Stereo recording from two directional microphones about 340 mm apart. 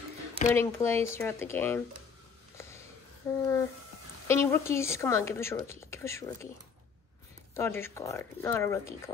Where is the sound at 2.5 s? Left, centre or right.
Centre.